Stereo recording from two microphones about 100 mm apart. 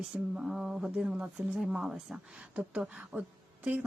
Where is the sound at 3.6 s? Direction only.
15° right (ahead or behind).